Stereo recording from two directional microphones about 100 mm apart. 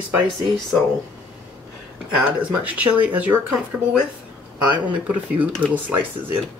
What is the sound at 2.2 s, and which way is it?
Speech, 15° right (ahead or behind).